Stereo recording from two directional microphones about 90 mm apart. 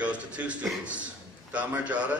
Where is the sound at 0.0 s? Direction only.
15° right (ahead or behind).